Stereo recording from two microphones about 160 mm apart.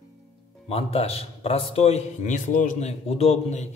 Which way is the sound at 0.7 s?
35° left (ahead or behind).